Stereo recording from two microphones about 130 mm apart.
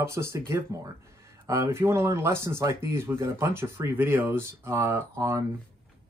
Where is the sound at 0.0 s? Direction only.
20° right (ahead or behind).